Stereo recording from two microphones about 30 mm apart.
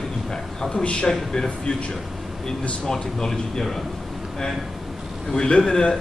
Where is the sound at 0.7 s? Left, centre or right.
Left.